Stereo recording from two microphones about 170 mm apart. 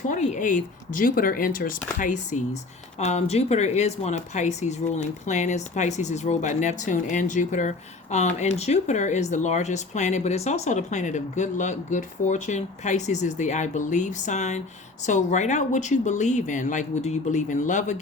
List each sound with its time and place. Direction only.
0.1 s speech: 45° left (ahead or behind)